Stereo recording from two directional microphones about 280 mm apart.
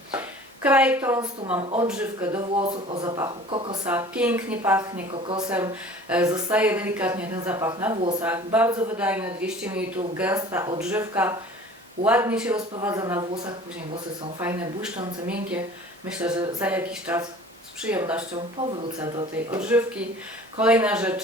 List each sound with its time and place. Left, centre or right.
0.1 s a sound: centre
1.9 s speech: centre
2.6 s speech: centre
3.8 s speech: centre
5.1 s speech: centre
5.5 s speech: centre
18.3 s speech: centre